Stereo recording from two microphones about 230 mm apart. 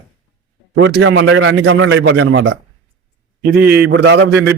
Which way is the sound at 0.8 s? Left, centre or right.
Right.